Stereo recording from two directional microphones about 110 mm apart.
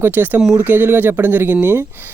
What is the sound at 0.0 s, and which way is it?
Speech, 15° right (ahead or behind).